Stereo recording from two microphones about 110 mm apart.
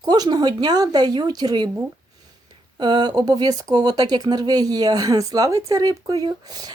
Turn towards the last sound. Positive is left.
turn(degrees=-40)  # may be behind; listen again after turning